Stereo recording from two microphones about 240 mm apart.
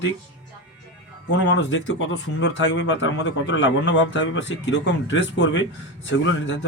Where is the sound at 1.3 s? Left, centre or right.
Left.